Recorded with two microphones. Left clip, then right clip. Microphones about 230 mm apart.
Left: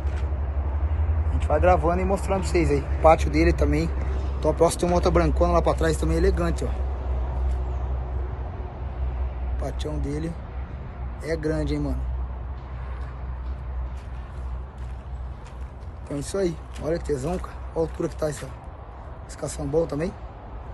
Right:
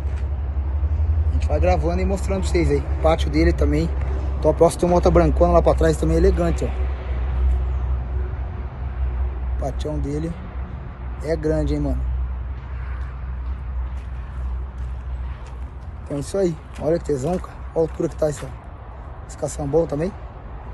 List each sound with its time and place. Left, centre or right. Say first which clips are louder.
1.4 s speech: left 1 dB; centre
2.4 s speech: right 2 dB; right
3.3 s speech: right 2 dB; centre
4.1 s vehicle: right 3 dB; right
4.4 s speech: right 5 dB; centre
9.6 s speech: right 5 dB; centre
16.1 s speech: right 4 dB; centre